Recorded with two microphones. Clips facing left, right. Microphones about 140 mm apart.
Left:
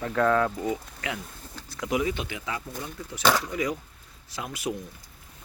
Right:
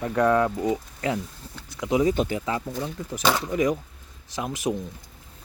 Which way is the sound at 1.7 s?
20° right (ahead or behind).